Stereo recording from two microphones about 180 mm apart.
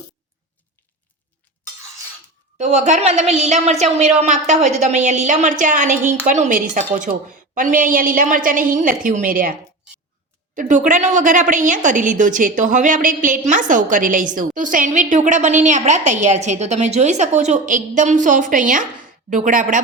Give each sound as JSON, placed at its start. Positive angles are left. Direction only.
{"t": 2.6, "sound": "a woman's voice", "side_deg": -40}